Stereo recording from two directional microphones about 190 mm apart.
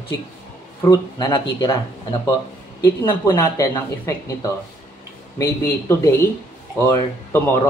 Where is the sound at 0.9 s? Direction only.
20° left (ahead or behind).